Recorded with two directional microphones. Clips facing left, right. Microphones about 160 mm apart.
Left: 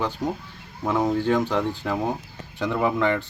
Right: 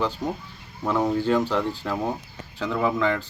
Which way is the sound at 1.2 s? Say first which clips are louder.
Even; 10° right (ahead or behind).